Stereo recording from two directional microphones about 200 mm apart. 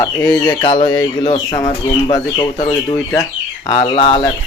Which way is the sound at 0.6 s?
25° left (ahead or behind).